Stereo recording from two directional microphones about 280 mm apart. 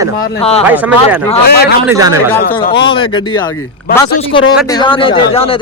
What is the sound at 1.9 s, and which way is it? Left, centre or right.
Speech, centre.